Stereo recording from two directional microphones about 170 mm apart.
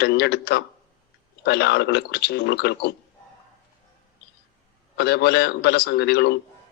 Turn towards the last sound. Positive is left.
turn(degrees=75)  # may be behind; listen again after turning